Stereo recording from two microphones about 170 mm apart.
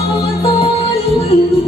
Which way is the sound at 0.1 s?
35° left (ahead or behind).